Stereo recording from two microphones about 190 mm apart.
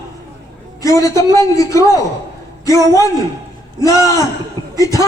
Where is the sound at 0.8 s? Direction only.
15° left (ahead or behind).